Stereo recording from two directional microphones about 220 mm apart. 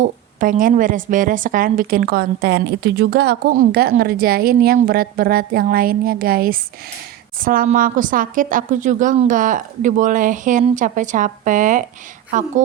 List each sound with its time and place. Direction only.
0.0 s a woman's voice: 35° right (ahead or behind)